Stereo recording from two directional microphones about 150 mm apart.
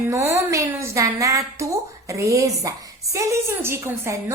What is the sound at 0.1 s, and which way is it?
A woman's voice, 20° right (ahead or behind).